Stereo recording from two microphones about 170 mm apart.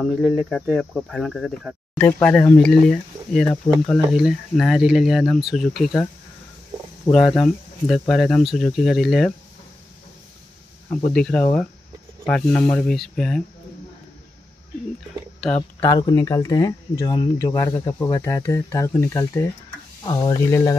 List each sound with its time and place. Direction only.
0.0 s speech: centre (ahead or behind)
7.1 s speech: 5° left (ahead or behind)
11.1 s speech: 5° left (ahead or behind)
15.8 s speech: 25° left (ahead or behind)